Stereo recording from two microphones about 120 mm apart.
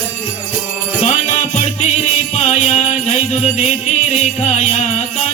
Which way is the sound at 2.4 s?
70° left (ahead or behind).